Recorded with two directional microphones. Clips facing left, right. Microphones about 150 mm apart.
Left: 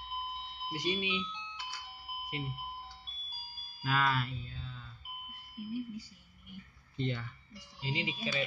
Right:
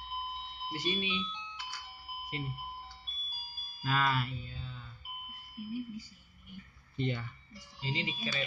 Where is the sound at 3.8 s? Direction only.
Centre (ahead or behind).